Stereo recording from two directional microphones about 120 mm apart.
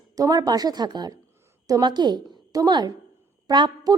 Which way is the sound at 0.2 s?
30° right (ahead or behind).